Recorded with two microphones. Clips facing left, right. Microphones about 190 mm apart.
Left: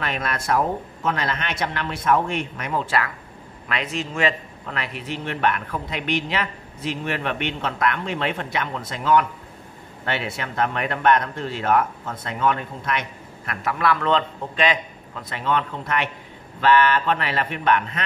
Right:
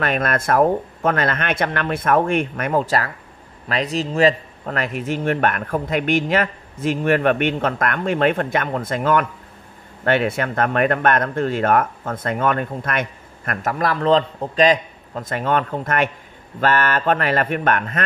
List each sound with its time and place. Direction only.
0.0 s speech: 50° right (ahead or behind)